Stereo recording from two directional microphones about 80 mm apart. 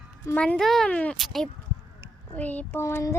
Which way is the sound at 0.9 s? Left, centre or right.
Centre.